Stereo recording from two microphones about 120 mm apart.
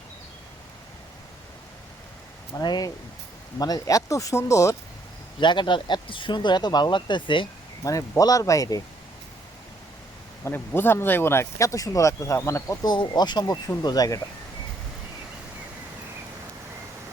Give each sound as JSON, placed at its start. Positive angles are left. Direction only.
{"t": 2.5, "sound": "speech", "side_deg": 35}
{"t": 5.4, "sound": "speech", "side_deg": 40}
{"t": 7.9, "sound": "speech", "side_deg": 30}
{"t": 10.4, "sound": "speech", "side_deg": 15}
{"t": 12.8, "sound": "speech", "side_deg": 35}